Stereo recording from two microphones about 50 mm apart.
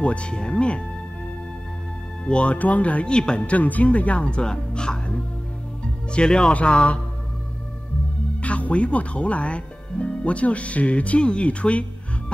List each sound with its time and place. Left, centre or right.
0.0 s speech: left
2.2 s speech: left
6.1 s speech: centre
8.4 s speech: left